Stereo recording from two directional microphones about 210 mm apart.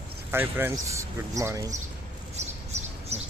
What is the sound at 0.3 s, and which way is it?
Speech, 10° right (ahead or behind).